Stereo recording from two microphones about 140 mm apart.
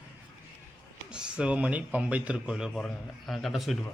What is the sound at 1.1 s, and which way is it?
A man's voice, 5° right (ahead or behind).